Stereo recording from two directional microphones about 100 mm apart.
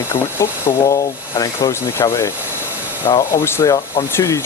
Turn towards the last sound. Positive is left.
turn(degrees=30)  # may be behind; listen again after turning